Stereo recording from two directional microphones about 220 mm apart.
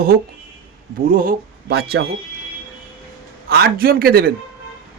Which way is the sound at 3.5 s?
45° right (ahead or behind).